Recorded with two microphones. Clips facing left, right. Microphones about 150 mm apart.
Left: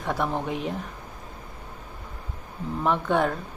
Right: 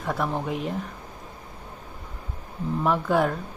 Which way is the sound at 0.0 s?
Centre (ahead or behind).